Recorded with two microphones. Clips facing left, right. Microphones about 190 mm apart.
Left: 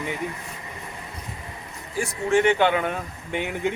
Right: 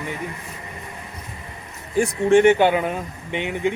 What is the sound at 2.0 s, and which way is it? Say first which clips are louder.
Speech: right 6 dB; 30° right (ahead or behind).